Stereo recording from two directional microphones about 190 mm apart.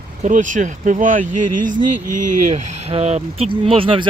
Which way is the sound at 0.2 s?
40° right (ahead or behind).